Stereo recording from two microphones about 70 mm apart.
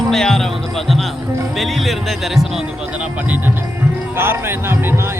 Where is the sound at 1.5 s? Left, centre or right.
Centre.